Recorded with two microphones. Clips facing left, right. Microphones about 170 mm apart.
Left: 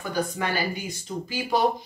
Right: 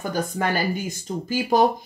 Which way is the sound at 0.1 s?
45° right (ahead or behind).